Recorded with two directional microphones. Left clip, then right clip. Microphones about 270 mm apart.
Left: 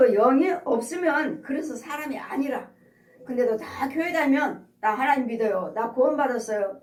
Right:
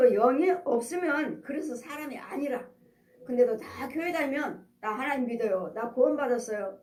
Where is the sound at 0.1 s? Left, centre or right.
Right.